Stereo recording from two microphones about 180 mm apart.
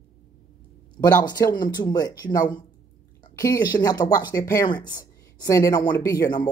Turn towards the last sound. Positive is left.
turn(degrees=20)  # may be behind; listen again after turning